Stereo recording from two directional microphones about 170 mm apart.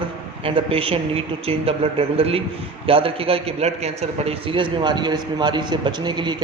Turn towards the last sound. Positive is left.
turn(degrees=-25)  # may be behind; listen again after turning